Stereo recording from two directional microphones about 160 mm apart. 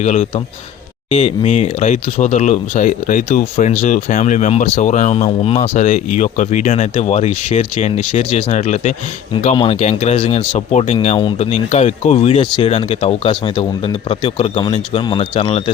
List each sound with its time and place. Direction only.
0.0 s speech: 45° left (ahead or behind)
10.7 s speech: 45° left (ahead or behind)
10.9 s speech: 35° left (ahead or behind)